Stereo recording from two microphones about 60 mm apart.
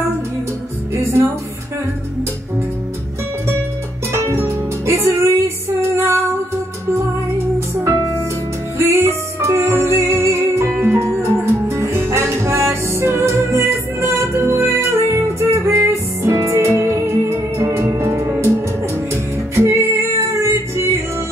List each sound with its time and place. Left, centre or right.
0.9 s music: right
4.1 s music: right
8.7 s music: right
19.5 s music: right